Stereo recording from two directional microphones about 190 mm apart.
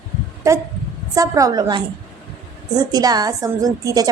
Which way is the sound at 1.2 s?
20° right (ahead or behind).